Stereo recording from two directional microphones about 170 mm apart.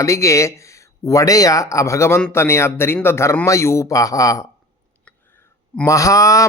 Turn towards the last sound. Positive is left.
turn(degrees=20)  # may be behind; listen again after turning